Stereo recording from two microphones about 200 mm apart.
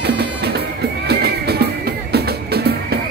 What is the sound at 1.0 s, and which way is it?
Music, 55° right (ahead or behind).